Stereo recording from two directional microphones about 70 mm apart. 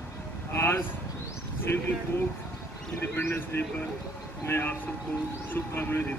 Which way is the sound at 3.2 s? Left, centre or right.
Left.